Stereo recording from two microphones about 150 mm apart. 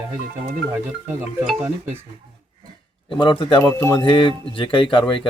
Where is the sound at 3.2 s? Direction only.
35° left (ahead or behind).